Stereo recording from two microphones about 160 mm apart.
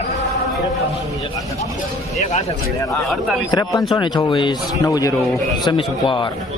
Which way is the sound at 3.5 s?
25° left (ahead or behind).